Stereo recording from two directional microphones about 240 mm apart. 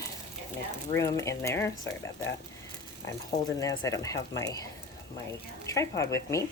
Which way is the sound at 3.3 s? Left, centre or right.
Centre.